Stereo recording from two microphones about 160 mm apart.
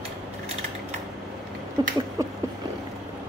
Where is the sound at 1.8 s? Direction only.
25° right (ahead or behind).